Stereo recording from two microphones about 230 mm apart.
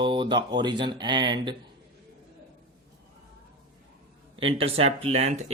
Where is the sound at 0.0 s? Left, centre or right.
Right.